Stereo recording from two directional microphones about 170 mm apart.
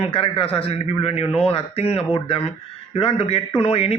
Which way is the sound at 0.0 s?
35° left (ahead or behind).